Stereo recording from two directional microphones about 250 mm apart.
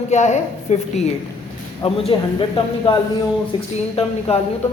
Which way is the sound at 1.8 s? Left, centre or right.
Left.